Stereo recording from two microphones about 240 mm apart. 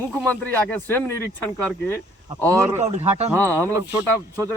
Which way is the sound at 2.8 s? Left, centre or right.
Right.